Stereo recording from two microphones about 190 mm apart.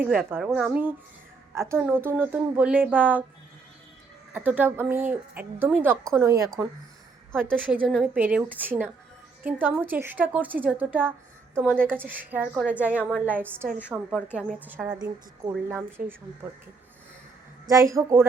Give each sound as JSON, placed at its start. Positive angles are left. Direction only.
{"t": 0.0, "sound": "a woman's voice", "side_deg": -10}
{"t": 4.4, "sound": "a woman's voice", "side_deg": -10}
{"t": 7.5, "sound": "a woman's voice", "side_deg": -10}
{"t": 17.7, "sound": "a woman's voice", "side_deg": -15}